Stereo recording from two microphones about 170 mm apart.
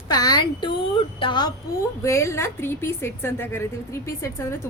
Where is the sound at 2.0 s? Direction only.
15° left (ahead or behind).